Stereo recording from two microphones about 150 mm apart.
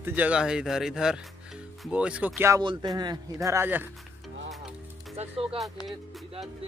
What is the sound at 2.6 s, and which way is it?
A man's voice, 30° right (ahead or behind).